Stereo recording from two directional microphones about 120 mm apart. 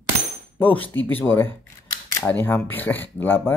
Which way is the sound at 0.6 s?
15° left (ahead or behind).